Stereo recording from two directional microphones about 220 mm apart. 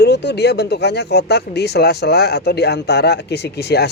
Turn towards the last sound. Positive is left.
turn(degrees=50)  # may be behind; listen again after turning